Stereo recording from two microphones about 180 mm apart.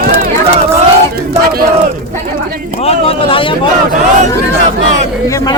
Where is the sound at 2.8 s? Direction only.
35° left (ahead or behind).